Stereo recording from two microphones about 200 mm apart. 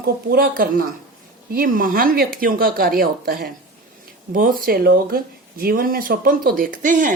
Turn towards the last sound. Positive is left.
turn(degrees=-40)  # may be behind; listen again after turning